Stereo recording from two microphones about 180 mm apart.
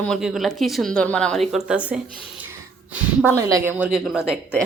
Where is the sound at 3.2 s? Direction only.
20° right (ahead or behind).